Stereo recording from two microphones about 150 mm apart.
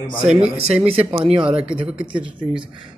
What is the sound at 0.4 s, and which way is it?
Speech, 45° right (ahead or behind).